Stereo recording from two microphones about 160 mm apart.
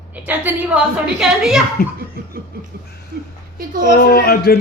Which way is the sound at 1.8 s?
60° left (ahead or behind).